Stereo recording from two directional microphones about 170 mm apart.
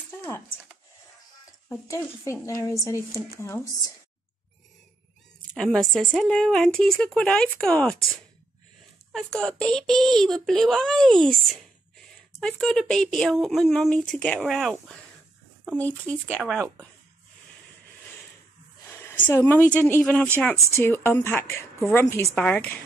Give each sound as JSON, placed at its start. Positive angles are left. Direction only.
{"t": 1.7, "sound": "speech", "side_deg": 15}
{"t": 5.5, "sound": "speech", "side_deg": 5}
{"t": 9.1, "sound": "speech", "side_deg": 5}
{"t": 12.4, "sound": "speech", "side_deg": 5}
{"t": 16.3, "sound": "speech", "side_deg": -5}
{"t": 19.2, "sound": "speech", "side_deg": 10}